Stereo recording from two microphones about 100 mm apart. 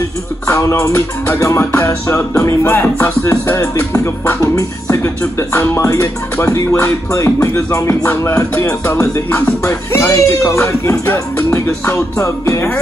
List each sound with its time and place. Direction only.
0.5 s music: 30° left (ahead or behind)